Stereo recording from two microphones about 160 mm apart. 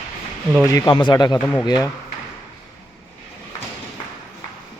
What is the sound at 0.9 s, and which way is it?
Speech, 30° left (ahead or behind).